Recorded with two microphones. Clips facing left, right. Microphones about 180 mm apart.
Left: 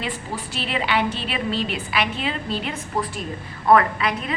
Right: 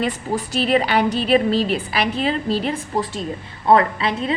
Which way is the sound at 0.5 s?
40° right (ahead or behind).